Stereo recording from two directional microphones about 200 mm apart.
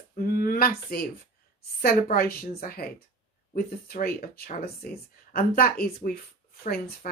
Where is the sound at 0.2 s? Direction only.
50° left (ahead or behind).